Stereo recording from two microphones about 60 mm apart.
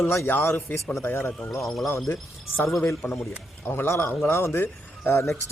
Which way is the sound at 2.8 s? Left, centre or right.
Left.